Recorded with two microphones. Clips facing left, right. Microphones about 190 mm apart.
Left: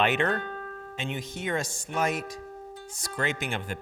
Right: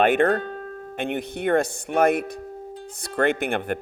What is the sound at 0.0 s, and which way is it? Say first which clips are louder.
Speech: right 7 dB; 50° right (ahead or behind).